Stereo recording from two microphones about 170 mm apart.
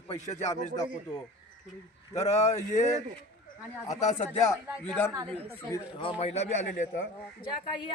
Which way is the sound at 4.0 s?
40° left (ahead or behind).